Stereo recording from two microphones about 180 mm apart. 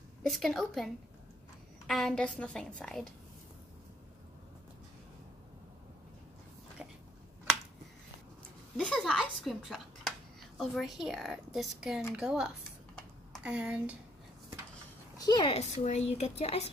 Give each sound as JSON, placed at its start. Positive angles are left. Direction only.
{"t": 0.2, "sound": "a woman's voice", "side_deg": 0}
{"t": 6.8, "sound": "a sound", "side_deg": -5}
{"t": 8.7, "sound": "a woman's voice", "side_deg": 5}
{"t": 12.2, "sound": "typing", "side_deg": -5}
{"t": 15.1, "sound": "a woman's voice", "side_deg": 25}